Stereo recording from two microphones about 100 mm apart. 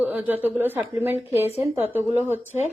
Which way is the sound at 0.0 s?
15° right (ahead or behind).